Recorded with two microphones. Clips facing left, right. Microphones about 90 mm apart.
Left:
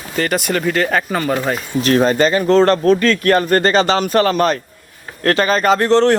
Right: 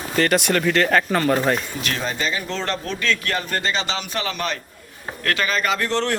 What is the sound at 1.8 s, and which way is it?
Speech, 45° left (ahead or behind).